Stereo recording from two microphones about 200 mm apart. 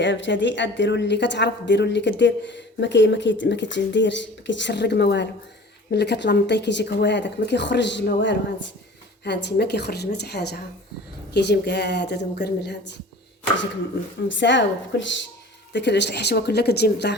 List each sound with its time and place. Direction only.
0.0 s a woman's voice: 65° left (ahead or behind)
14.3 s a woman's voice: 65° left (ahead or behind)